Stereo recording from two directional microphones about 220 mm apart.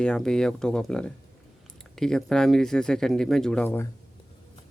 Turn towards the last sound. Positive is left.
turn(degrees=5)  # may be behind; listen again after turning